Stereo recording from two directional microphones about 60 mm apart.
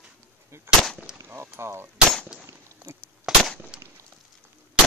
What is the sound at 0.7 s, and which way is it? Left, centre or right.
Gunshot, right.